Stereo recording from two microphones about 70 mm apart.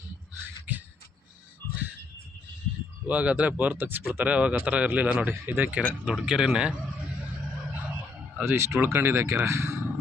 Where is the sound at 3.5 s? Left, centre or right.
Right.